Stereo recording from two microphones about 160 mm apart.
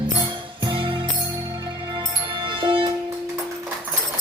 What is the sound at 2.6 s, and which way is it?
Music, 30° right (ahead or behind).